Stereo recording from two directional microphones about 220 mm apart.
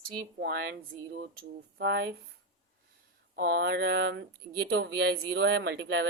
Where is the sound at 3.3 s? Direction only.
45° right (ahead or behind).